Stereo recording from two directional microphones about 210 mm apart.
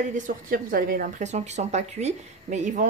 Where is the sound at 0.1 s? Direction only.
45° right (ahead or behind).